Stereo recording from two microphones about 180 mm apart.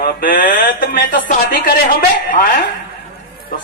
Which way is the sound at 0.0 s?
50° left (ahead or behind).